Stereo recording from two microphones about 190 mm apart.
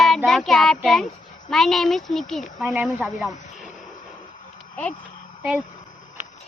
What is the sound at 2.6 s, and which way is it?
Speech, 10° right (ahead or behind).